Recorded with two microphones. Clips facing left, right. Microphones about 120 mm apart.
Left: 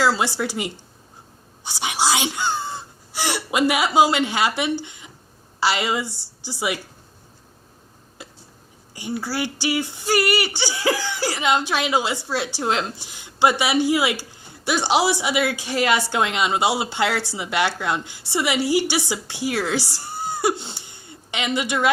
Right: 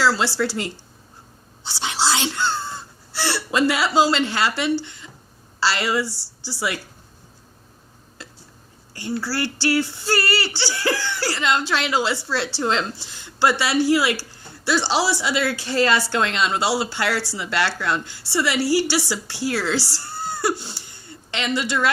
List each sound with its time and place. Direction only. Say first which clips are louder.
0.0 s a woman's voice: even; 20° left (ahead or behind)
8.2 s a sound: left 1 dB; 15° left (ahead or behind)
8.9 s speech: right 1 dB; 15° left (ahead or behind)